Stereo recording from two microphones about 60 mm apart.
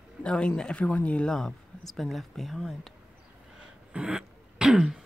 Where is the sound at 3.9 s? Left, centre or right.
Centre.